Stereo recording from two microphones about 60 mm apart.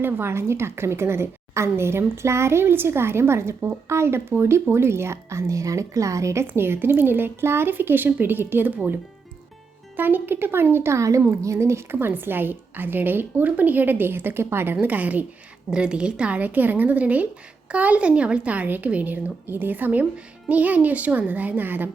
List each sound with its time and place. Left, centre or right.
0.0 s a woman's voice: right
6.4 s a woman's voice: right
10.0 s a woman's voice: right
15.7 s speech: centre; by 21.8 s right